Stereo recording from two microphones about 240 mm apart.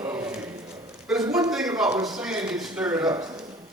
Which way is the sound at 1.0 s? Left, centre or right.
Centre.